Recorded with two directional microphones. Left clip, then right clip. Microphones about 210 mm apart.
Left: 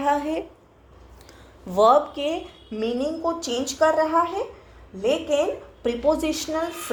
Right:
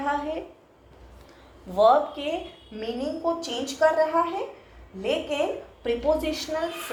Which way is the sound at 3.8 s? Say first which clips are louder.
Left 2 dB; 45° left (ahead or behind).